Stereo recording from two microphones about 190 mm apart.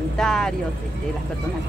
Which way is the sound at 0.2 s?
Centre (ahead or behind).